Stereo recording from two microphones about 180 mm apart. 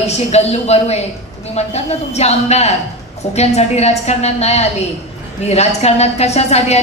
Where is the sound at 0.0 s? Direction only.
35° left (ahead or behind).